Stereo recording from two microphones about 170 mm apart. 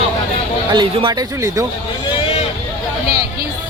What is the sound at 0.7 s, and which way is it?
Speech, 25° right (ahead or behind).